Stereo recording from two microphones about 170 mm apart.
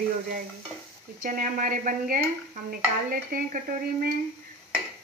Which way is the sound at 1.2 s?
50° right (ahead or behind).